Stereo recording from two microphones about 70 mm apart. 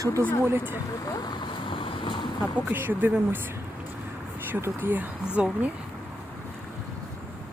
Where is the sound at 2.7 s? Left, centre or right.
Right.